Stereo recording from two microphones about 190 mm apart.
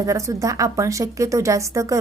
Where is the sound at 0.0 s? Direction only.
15° right (ahead or behind).